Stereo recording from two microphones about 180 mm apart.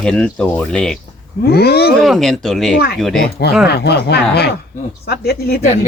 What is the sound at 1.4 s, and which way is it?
Speech, 60° left (ahead or behind).